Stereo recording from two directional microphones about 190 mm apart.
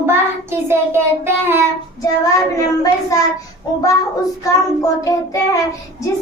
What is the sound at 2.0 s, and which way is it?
A child's voice, 20° left (ahead or behind).